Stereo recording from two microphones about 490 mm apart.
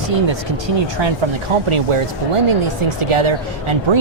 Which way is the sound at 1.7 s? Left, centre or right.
Right.